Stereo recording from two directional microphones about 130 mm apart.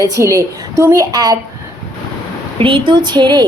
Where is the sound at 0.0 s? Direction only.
25° right (ahead or behind).